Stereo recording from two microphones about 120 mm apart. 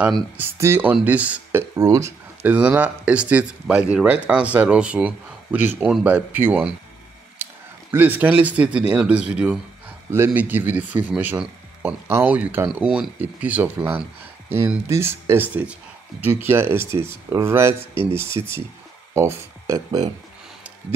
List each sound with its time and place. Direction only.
0.4 s speech: 20° right (ahead or behind)
1.8 s speech: 25° right (ahead or behind)
2.4 s speech: 10° right (ahead or behind)
7.9 s speech: 15° right (ahead or behind)